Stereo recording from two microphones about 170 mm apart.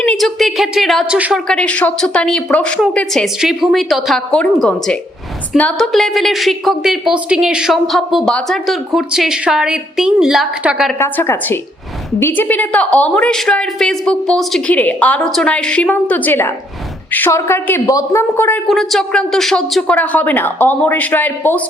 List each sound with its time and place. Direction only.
0.0 s a woman's voice: 5° left (ahead or behind)
11.0 s a woman's voice: 15° left (ahead or behind)
18.7 s a woman's voice: centre (ahead or behind)